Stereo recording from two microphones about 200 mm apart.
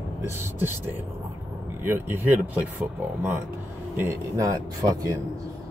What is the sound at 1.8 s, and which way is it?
Speech, 10° right (ahead or behind).